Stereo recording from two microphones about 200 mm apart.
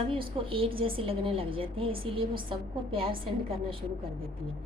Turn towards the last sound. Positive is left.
turn(degrees=-25)  # may be behind; listen again after turning